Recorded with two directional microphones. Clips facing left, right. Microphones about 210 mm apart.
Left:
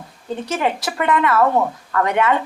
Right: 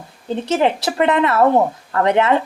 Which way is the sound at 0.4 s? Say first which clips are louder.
Right 5 dB; 25° right (ahead or behind).